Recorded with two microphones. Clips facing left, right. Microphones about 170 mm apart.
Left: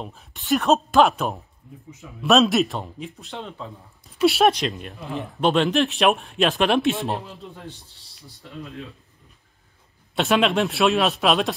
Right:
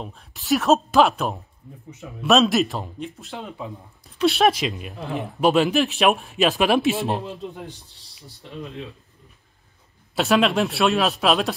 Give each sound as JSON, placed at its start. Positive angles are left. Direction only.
{"t": 0.0, "sound": "speech", "side_deg": 0}
{"t": 7.2, "sound": "a man's voice", "side_deg": -15}
{"t": 10.1, "sound": "speech", "side_deg": 0}